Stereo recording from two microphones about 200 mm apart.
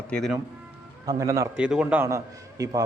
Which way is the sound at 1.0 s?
15° right (ahead or behind).